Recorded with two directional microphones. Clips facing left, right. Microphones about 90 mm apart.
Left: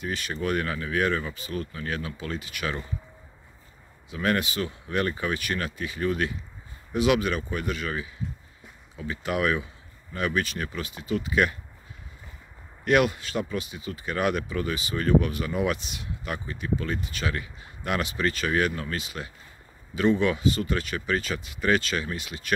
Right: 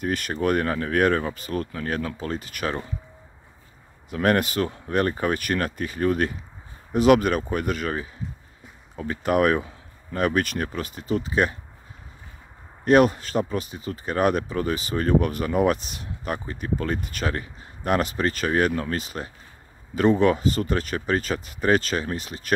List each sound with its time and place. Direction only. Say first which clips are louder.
0.0 s speech: right 5 dB; 50° right (ahead or behind)
4.1 s speech: right 5 dB; 50° right (ahead or behind); by 11.5 s 35° right (ahead or behind)
12.8 s speech: right 5 dB; 35° right (ahead or behind)